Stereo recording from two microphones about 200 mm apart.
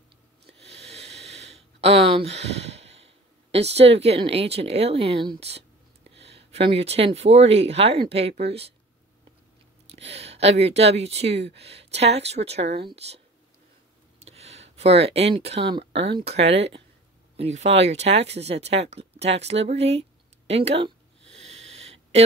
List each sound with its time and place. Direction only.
0.5 s a sound: 30° right (ahead or behind)
3.5 s speech: 30° right (ahead or behind)
9.8 s speech: 30° right (ahead or behind)
14.2 s a sound: 30° right (ahead or behind)
14.8 s speech: 30° right (ahead or behind)
21.2 s wheeze: 65° right (ahead or behind)